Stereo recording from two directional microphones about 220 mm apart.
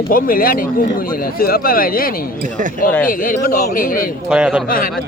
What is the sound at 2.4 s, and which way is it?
Speech, 35° right (ahead or behind).